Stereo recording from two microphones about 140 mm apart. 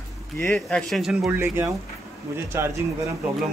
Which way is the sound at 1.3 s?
15° right (ahead or behind).